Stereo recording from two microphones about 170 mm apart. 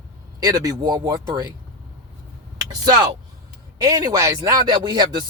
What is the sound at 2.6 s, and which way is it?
Speech, 20° right (ahead or behind).